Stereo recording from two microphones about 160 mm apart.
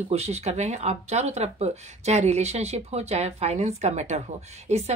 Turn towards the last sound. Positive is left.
turn(degrees=-45)  # may be behind; listen again after turning